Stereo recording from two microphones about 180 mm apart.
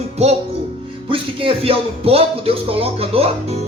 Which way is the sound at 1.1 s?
30° right (ahead or behind).